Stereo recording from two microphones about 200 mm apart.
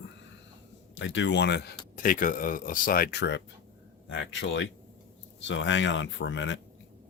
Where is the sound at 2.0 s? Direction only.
40° left (ahead or behind); by 6.6 s 65° left (ahead or behind).